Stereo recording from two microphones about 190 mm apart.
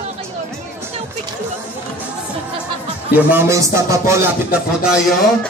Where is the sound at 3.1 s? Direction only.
10° right (ahead or behind).